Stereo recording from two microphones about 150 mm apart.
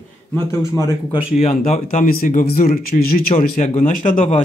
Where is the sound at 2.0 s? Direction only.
65° left (ahead or behind).